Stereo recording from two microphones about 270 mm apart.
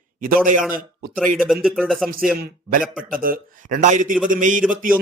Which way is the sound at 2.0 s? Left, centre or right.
Right.